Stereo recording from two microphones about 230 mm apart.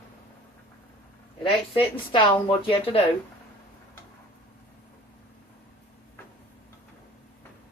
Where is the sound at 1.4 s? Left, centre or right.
Left.